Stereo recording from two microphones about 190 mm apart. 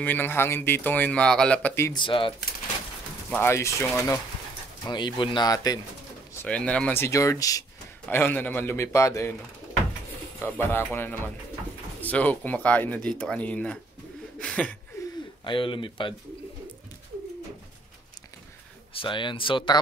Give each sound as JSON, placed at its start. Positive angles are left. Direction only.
{"t": 0.0, "sound": "speech", "side_deg": 10}
{"t": 1.9, "sound": "speech", "side_deg": 25}
{"t": 3.3, "sound": "speech", "side_deg": 10}
{"t": 4.8, "sound": "speech", "side_deg": 25}
{"t": 6.4, "sound": "speech", "side_deg": 5}
{"t": 10.4, "sound": "speech", "side_deg": 10}
{"t": 14.4, "sound": "chuckle", "side_deg": 5}
{"t": 15.4, "sound": "speech", "side_deg": 25}
{"t": 18.9, "sound": "speech", "side_deg": 25}